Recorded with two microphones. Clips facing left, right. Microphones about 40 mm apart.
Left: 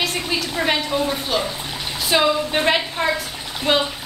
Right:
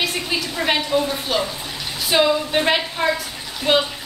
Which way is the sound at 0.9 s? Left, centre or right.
Centre.